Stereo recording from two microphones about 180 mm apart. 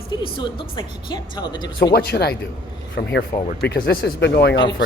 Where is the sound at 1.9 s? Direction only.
65° left (ahead or behind).